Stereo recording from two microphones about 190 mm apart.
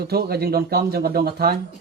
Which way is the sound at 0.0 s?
55° right (ahead or behind).